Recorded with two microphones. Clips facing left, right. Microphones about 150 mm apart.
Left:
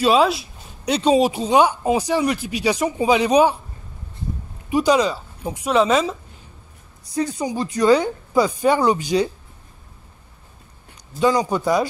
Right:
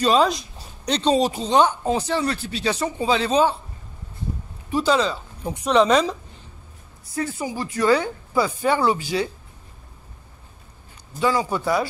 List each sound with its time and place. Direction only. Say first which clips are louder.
0.0 s speech: left 2 dB; 5° left (ahead or behind)
4.6 s speech: left 3 dB; 15° left (ahead or behind)
7.2 s speech: left 4 dB; 20° left (ahead or behind)
11.1 s speech: left 3 dB; 20° left (ahead or behind)